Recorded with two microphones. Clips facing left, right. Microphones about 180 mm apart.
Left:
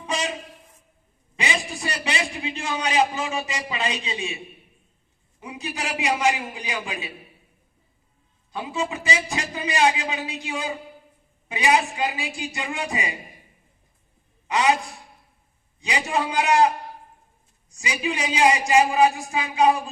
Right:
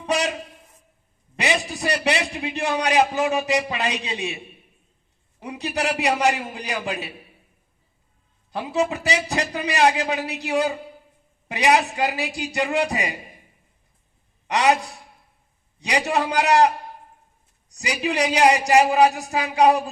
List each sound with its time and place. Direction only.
0.1 s a sound: 70° right (ahead or behind)
1.4 s a sound: 65° right (ahead or behind)
2.0 s a man's voice: 65° right (ahead or behind)
5.4 s a man's voice: 70° right (ahead or behind)
8.5 s a man's voice: 65° right (ahead or behind)
14.4 s a man's voice: 70° right (ahead or behind)
15.8 s a man's voice: 70° right (ahead or behind)
17.7 s a man's voice: 70° right (ahead or behind)